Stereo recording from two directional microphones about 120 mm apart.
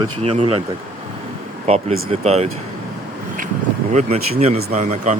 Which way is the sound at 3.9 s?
70° right (ahead or behind).